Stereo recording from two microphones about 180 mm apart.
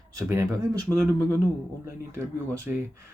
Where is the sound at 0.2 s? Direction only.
15° right (ahead or behind).